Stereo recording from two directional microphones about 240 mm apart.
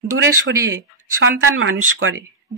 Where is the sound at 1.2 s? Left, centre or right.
Right.